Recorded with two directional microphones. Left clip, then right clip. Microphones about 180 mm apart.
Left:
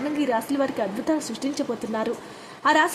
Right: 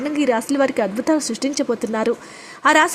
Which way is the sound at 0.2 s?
25° right (ahead or behind).